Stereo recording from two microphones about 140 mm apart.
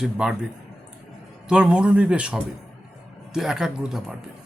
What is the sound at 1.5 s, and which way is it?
Speech, 5° right (ahead or behind).